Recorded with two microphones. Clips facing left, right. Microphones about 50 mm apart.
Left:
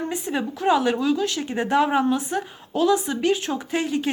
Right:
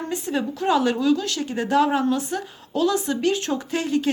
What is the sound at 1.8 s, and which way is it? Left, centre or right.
A woman's voice, centre.